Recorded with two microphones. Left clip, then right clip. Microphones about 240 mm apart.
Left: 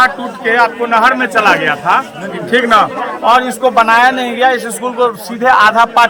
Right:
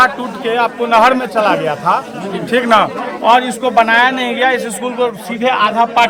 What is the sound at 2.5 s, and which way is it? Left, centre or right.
Speech, centre.